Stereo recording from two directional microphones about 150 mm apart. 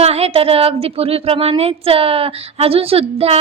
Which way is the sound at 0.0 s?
45° right (ahead or behind).